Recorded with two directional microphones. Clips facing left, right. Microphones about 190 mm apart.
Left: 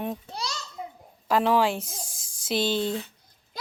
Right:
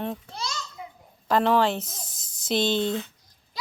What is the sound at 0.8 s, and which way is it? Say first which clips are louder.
Babbling: left 3 dB; 35° left (ahead or behind).